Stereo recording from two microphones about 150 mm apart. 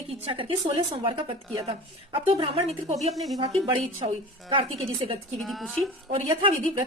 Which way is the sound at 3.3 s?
35° right (ahead or behind).